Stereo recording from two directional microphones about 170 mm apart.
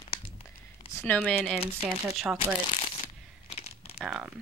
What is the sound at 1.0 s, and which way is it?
Speech, 10° left (ahead or behind).